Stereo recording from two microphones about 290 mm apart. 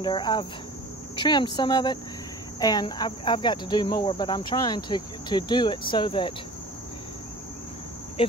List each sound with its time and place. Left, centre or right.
0.0 s cricket: centre
1.1 s speech: centre
1.6 s cricket: centre
8.2 s cricket: centre